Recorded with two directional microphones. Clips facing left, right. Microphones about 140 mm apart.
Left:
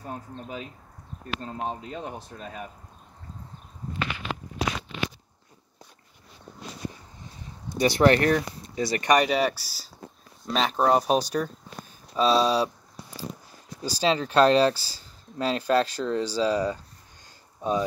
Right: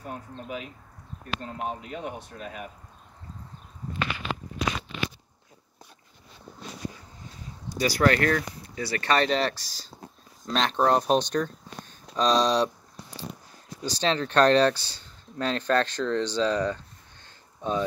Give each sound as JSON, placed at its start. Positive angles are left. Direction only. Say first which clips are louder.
{"t": 0.0, "sound": "speech", "louder": "left 1 dB", "side_deg": 30}
{"t": 7.7, "sound": "speech", "louder": "left 3 dB", "side_deg": 25}
{"t": 13.8, "sound": "speech", "louder": "left 2 dB", "side_deg": 10}